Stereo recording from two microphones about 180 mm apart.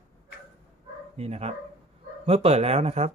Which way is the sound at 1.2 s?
35° right (ahead or behind).